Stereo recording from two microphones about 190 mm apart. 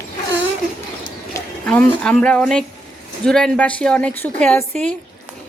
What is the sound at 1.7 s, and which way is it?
A woman's voice, 5° left (ahead or behind).